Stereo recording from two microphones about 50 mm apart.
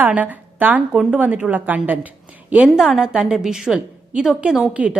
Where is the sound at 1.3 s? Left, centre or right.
Right.